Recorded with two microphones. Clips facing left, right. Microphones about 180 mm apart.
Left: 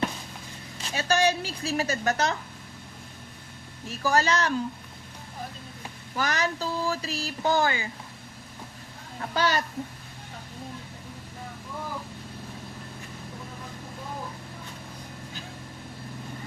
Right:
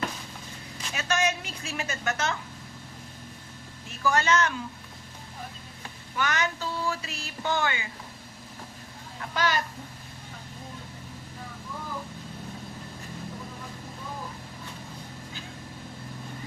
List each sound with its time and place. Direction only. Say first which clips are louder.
0.8 s speech: left 4 dB; 35° left (ahead or behind)
3.8 s speech: left 1 dB; 35° left (ahead or behind)
6.1 s speech: left 1 dB; 35° left (ahead or behind)
9.3 s speech: left 2 dB; 35° left (ahead or behind)